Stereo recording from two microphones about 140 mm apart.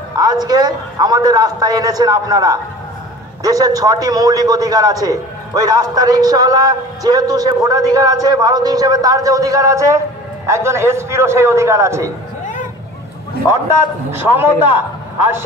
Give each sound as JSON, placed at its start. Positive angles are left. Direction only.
{"t": 0.2, "sound": "a man's voice", "side_deg": -30}
{"t": 14.1, "sound": "a man's voice", "side_deg": -15}